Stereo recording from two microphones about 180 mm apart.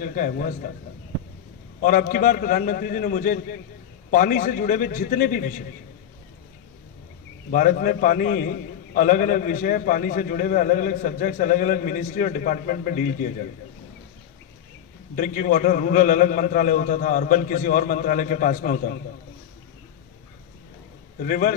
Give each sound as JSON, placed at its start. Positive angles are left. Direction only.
{"t": 0.0, "sound": "a man's voice", "side_deg": 45}
{"t": 1.8, "sound": "a man's voice", "side_deg": 50}
{"t": 7.5, "sound": "a man's voice", "side_deg": 50}
{"t": 15.1, "sound": "a man's voice", "side_deg": 50}
{"t": 21.2, "sound": "a man's voice", "side_deg": 50}